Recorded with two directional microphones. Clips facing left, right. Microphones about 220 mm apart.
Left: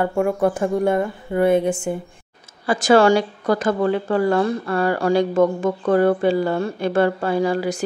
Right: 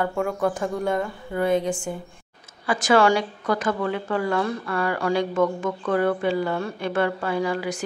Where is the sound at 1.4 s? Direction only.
60° left (ahead or behind).